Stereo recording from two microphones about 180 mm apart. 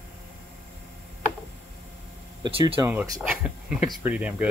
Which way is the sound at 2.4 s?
30° right (ahead or behind).